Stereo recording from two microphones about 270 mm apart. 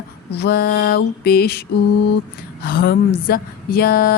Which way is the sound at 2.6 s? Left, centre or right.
Left.